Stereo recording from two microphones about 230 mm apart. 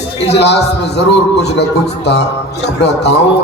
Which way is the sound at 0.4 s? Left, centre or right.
Left.